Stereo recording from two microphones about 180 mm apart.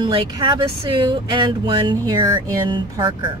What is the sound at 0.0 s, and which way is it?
Speech, 25° right (ahead or behind).